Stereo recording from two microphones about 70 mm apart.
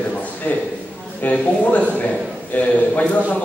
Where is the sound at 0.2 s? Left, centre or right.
Left.